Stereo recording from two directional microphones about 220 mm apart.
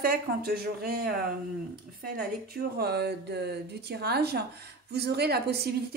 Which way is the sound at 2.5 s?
45° right (ahead or behind).